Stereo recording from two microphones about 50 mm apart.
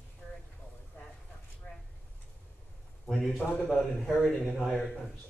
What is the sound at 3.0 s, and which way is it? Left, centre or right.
A man's voice, centre.